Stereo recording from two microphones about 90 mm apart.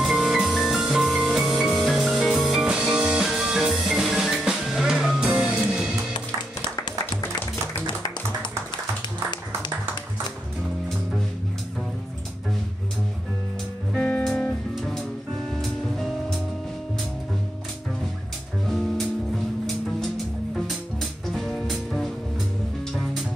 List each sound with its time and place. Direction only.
0.0 s music: centre (ahead or behind)
7.8 s music: 60° left (ahead or behind)
13.9 s music: 20° left (ahead or behind)
18.7 s music: centre (ahead or behind)
21.3 s music: 5° left (ahead or behind)